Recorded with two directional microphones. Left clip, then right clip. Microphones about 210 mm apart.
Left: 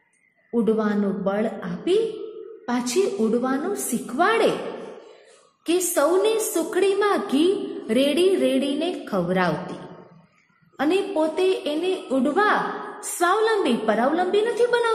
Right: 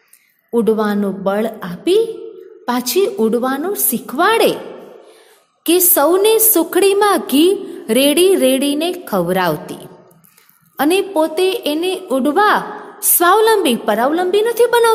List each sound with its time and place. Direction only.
0.5 s a woman's voice: 45° right (ahead or behind)
5.6 s a woman's voice: 45° right (ahead or behind)
10.8 s a woman's voice: 45° right (ahead or behind)